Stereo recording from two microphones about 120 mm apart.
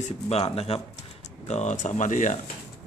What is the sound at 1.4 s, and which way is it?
Speech, 75° left (ahead or behind).